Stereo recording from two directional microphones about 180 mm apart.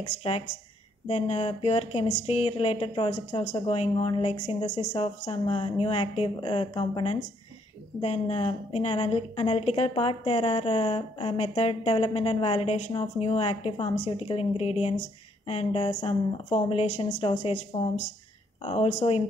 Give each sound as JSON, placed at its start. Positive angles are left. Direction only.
{"t": 1.0, "sound": "a woman's voice", "side_deg": 35}